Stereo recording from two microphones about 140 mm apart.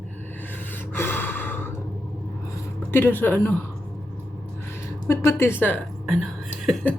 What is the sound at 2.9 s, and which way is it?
Speech, 15° left (ahead or behind).